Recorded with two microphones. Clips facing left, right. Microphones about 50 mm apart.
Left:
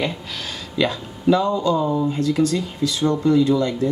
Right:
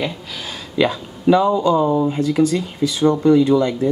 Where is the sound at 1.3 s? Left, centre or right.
Centre.